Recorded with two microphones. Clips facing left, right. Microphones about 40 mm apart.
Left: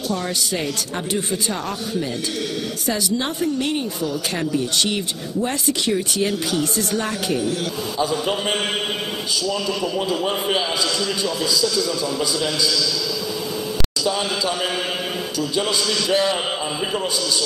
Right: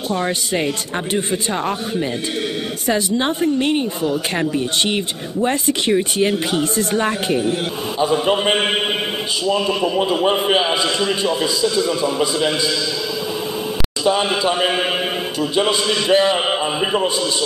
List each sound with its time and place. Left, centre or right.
0.1 s a woman's voice: right
14.0 s a man's voice: right